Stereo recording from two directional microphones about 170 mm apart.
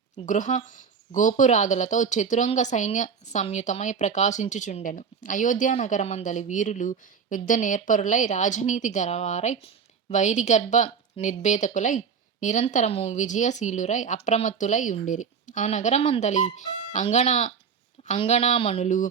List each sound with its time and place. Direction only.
0.3 s a woman's voice: 50° left (ahead or behind)